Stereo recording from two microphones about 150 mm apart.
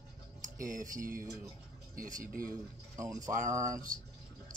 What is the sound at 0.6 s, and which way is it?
A man's voice, 60° right (ahead or behind).